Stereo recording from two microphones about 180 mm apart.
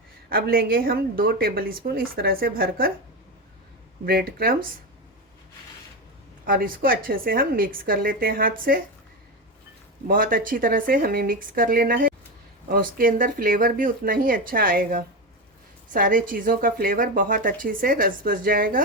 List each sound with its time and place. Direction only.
0.3 s speech: 55° right (ahead or behind)
4.0 s speech: 55° right (ahead or behind)
6.4 s a woman's voice: 50° right (ahead or behind)
10.1 s a woman's voice: 50° right (ahead or behind)